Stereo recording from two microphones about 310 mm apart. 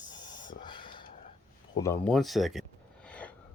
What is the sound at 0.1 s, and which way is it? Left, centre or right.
Spray, centre.